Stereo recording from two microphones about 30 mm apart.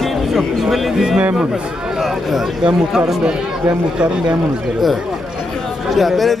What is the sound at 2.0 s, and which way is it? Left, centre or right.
Speech, centre.